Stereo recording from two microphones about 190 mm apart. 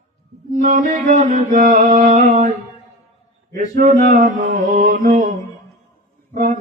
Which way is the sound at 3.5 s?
45° right (ahead or behind).